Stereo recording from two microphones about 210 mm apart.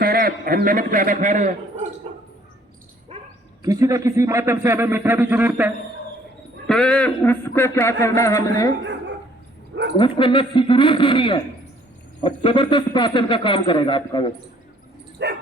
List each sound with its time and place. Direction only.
0.0 s a man's voice: 45° right (ahead or behind)
3.6 s a man's voice: 15° right (ahead or behind)
6.7 s speech: 5° left (ahead or behind)
8.8 s dog: 55° right (ahead or behind)
10.0 s speech: 25° left (ahead or behind)
15.2 s dog: 55° right (ahead or behind)